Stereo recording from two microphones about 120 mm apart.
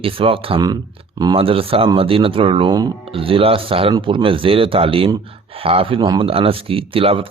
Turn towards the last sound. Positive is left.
turn(degrees=-50)  # may be behind; listen again after turning